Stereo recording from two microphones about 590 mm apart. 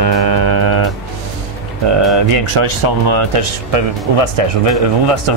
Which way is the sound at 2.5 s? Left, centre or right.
Right.